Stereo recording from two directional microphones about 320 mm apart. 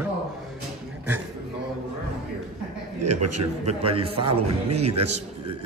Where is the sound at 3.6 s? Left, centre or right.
Centre.